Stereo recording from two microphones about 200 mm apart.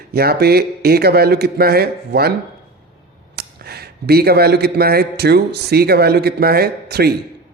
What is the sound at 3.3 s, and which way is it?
A man's voice, 50° right (ahead or behind).